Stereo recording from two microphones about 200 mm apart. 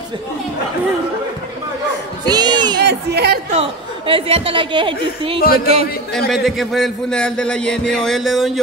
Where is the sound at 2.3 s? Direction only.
20° right (ahead or behind).